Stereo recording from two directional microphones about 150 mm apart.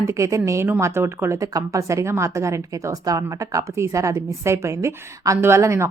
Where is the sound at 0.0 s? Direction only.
20° right (ahead or behind).